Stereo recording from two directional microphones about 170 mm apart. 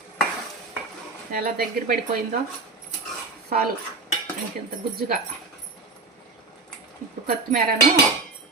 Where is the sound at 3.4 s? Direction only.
60° right (ahead or behind).